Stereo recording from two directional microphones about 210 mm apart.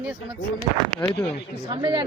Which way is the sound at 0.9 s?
15° left (ahead or behind).